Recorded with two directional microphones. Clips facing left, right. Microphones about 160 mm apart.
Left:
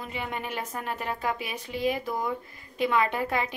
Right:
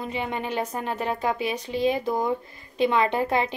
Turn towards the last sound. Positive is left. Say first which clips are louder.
# right 4 dB
turn(degrees=-25)  # may be behind; listen again after turning